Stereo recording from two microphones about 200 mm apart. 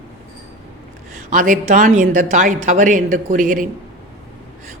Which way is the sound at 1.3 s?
40° right (ahead or behind).